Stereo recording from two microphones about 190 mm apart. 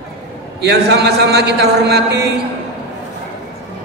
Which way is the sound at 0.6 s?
60° right (ahead or behind).